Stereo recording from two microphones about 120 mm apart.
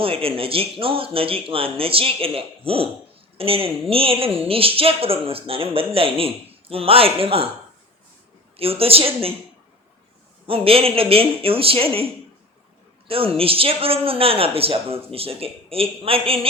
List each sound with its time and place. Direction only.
0.0 s a woman's voice: 50° right (ahead or behind)
8.5 s a woman's voice: 50° right (ahead or behind)
10.4 s a woman's voice: 50° right (ahead or behind)
13.1 s a woman's voice: 50° right (ahead or behind)